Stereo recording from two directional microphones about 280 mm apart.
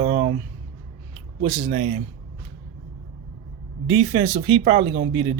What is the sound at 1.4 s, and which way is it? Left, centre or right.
Speech, right.